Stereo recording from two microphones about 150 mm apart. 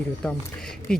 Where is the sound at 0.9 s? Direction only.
5° left (ahead or behind).